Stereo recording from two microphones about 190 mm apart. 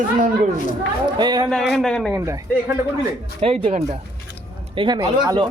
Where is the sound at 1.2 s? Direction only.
20° right (ahead or behind).